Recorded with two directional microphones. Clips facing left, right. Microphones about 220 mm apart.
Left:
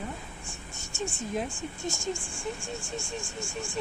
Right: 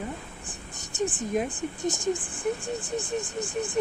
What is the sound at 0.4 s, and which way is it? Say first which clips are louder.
Speech: right 2 dB; 20° right (ahead or behind).